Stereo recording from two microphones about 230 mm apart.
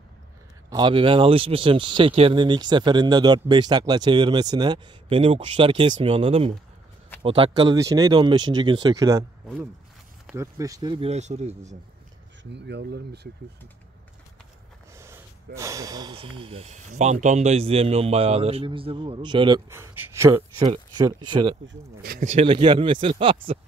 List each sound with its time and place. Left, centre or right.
0.7 s speech: centre
10.2 s speech: centre; by 11.7 s right
12.5 s speech: right
15.0 s speech: centre
21.6 s speech: right
22.3 s speech: right